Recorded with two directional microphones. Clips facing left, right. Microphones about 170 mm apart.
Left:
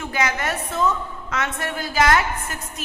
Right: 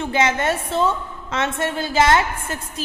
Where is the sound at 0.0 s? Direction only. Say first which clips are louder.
Right 5 dB; 25° right (ahead or behind).